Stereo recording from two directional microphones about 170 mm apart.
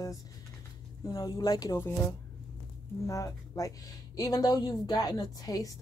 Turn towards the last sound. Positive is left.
turn(degrees=20)  # may be behind; listen again after turning